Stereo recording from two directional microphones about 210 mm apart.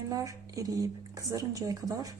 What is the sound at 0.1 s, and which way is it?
Speech, 15° right (ahead or behind).